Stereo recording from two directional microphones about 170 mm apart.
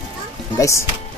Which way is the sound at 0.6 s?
15° left (ahead or behind).